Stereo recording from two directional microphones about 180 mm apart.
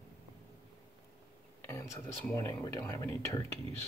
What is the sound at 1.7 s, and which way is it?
Speech, 15° left (ahead or behind).